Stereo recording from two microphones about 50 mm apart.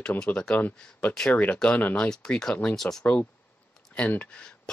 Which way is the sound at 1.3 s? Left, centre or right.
Left.